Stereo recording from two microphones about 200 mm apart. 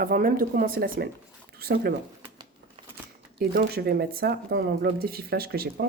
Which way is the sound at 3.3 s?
50° right (ahead or behind).